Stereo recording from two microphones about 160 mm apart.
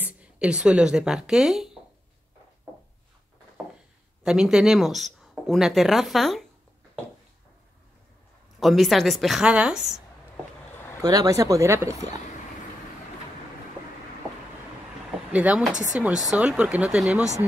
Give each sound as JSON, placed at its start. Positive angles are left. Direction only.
{"t": 0.0, "sound": "speech", "side_deg": -5}
{"t": 4.2, "sound": "speech", "side_deg": -5}
{"t": 8.5, "sound": "speech", "side_deg": 0}
{"t": 11.0, "sound": "speech", "side_deg": -20}
{"t": 15.3, "sound": "speech", "side_deg": -10}